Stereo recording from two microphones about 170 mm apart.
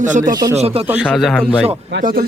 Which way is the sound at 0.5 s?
35° right (ahead or behind).